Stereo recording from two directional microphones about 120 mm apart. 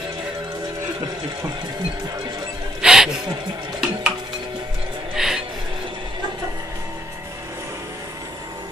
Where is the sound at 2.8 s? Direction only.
5° right (ahead or behind).